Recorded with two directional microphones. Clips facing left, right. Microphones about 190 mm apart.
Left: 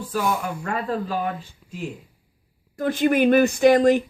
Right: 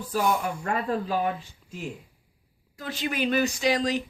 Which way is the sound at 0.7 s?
40° left (ahead or behind).